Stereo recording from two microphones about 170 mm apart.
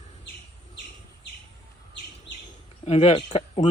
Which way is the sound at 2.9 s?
40° left (ahead or behind).